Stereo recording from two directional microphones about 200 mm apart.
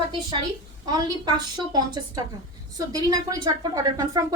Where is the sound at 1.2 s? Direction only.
20° right (ahead or behind).